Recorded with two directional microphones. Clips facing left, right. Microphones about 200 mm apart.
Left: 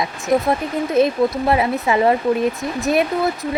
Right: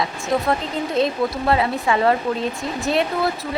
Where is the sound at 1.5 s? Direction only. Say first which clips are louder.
Left 2 dB; 20° left (ahead or behind).